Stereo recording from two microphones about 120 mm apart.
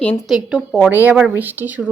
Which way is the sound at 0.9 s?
15° right (ahead or behind).